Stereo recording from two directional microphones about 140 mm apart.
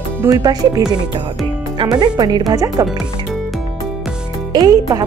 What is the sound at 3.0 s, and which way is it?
Music, centre (ahead or behind).